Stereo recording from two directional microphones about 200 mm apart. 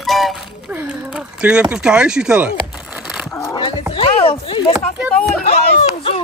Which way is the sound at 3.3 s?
15° left (ahead or behind).